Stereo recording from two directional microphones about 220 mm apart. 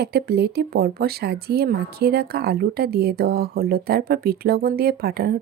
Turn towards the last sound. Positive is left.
turn(degrees=-45)  # may be behind; listen again after turning